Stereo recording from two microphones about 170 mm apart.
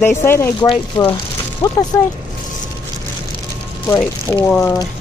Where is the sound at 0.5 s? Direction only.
30° left (ahead or behind).